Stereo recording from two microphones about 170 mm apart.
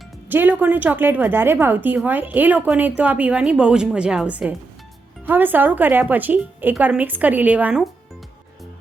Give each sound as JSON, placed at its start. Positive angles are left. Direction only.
{"t": 0.3, "sound": "a woman's voice", "side_deg": -10}